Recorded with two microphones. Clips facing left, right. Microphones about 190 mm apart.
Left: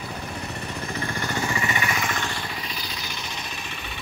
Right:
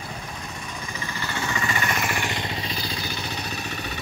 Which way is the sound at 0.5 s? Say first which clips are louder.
Left 4 dB; 60° left (ahead or behind).